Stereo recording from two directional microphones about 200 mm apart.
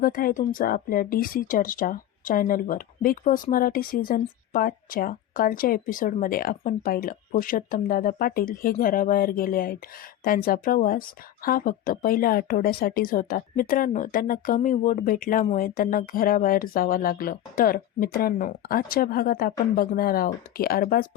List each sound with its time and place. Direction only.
0.0 s speech: 45° left (ahead or behind)